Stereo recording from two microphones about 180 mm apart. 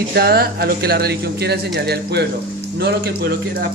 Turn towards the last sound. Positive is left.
turn(degrees=-55)  # may be behind; listen again after turning